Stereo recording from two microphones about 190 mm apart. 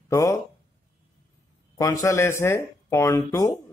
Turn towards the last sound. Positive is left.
turn(degrees=15)  # may be behind; listen again after turning